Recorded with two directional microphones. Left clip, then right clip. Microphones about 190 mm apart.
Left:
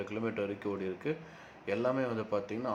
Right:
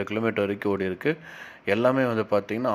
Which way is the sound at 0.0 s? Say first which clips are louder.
Right 10 dB; 35° right (ahead or behind).